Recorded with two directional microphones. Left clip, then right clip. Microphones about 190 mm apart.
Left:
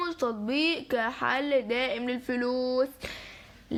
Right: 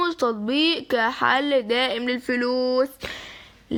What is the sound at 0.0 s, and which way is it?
A woman's voice, 35° right (ahead or behind).